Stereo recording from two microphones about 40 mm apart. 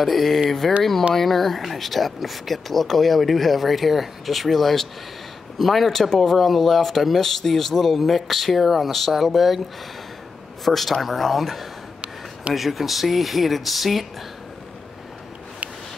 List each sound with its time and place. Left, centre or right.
0.0 s speech: centre
10.6 s speech: centre